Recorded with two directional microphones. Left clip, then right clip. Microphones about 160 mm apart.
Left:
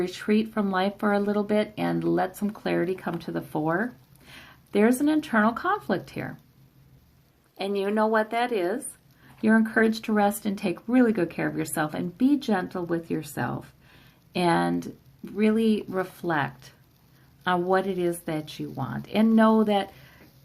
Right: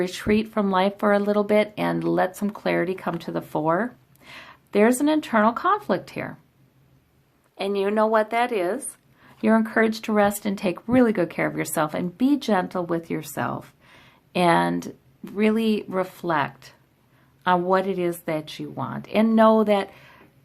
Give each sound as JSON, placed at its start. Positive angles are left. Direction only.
{"t": 0.0, "sound": "speech", "side_deg": -30}
{"t": 7.5, "sound": "speech", "side_deg": -25}